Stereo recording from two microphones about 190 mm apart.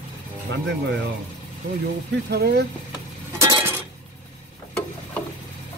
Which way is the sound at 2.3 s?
60° right (ahead or behind).